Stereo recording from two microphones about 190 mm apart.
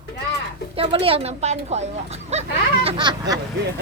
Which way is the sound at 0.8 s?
30° right (ahead or behind).